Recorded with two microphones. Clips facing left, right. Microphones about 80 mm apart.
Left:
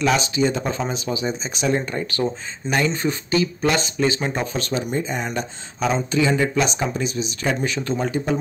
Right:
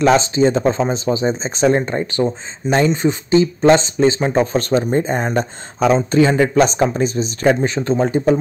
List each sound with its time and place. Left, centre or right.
0.0 s speech: right